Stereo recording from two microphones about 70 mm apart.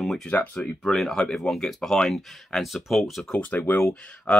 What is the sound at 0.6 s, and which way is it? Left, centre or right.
Speech, centre.